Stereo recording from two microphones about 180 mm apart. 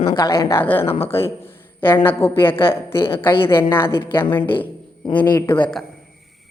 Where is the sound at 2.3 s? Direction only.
15° left (ahead or behind).